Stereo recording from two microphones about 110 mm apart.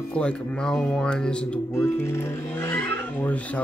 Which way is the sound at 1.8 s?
20° left (ahead or behind).